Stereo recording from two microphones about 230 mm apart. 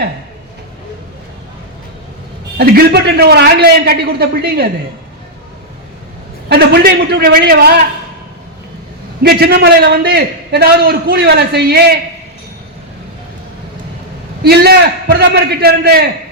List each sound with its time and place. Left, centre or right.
2.6 s a man's voice: right
6.5 s a man's voice: right
9.2 s a man's voice: right
14.4 s a man's voice: right